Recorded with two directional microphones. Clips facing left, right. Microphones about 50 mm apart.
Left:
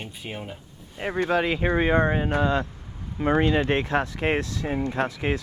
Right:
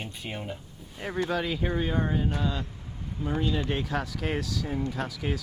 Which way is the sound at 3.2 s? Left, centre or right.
Left.